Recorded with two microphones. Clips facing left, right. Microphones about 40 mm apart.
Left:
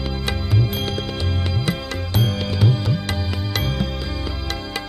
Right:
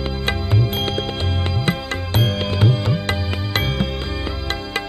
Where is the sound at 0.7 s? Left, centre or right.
Right.